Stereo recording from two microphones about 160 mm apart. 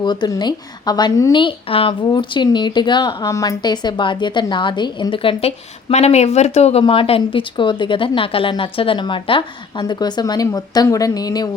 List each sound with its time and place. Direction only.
0.0 s a woman's voice: 25° left (ahead or behind)